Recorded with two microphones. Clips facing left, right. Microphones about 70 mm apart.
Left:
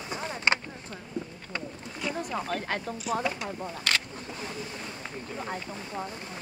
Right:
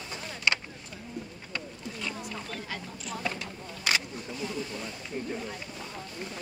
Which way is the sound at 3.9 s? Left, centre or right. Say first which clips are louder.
Even; centre.